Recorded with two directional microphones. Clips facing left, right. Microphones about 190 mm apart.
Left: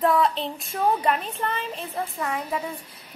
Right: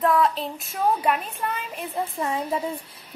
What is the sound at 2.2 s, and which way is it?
Speech, 25° right (ahead or behind).